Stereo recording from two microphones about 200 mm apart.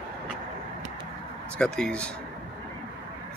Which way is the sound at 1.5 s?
5° left (ahead or behind).